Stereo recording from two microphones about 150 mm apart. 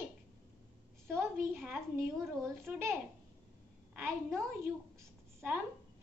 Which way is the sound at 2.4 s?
15° right (ahead or behind).